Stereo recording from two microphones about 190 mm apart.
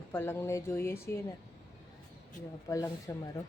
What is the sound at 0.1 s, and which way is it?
Speech, 10° left (ahead or behind).